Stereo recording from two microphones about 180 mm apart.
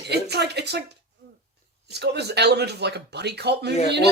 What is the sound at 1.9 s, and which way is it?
Speech, 65° right (ahead or behind).